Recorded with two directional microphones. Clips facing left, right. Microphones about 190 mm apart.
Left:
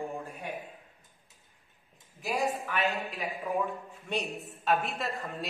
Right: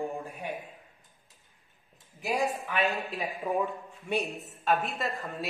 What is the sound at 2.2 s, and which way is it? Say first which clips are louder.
Speech: right 1 dB; 15° right (ahead or behind).